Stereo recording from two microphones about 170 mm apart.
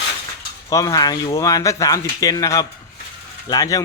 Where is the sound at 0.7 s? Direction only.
20° left (ahead or behind).